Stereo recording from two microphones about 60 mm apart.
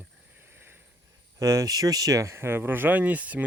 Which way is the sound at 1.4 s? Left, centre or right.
Right.